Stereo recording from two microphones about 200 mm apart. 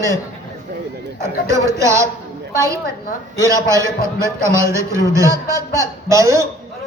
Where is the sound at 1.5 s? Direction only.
15° right (ahead or behind).